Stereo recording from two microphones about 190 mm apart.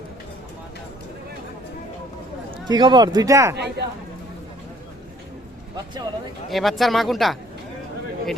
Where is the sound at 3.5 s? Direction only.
60° right (ahead or behind).